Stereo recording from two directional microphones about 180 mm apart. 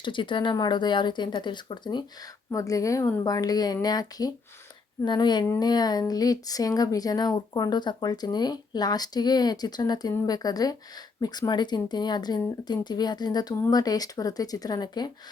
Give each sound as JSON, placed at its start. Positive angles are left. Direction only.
{"t": 0.0, "sound": "speech", "side_deg": 25}